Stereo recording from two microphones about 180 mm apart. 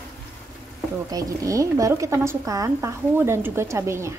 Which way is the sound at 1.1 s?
20° right (ahead or behind).